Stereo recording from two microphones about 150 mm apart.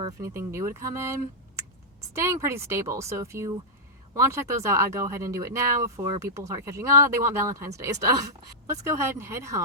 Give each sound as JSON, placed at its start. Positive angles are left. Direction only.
{"t": 0.2, "sound": "speech", "side_deg": -20}